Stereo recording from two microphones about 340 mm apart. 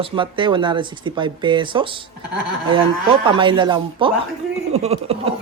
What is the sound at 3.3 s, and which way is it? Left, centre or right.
Speech, centre.